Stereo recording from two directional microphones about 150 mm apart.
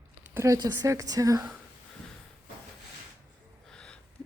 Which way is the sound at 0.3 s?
20° right (ahead or behind).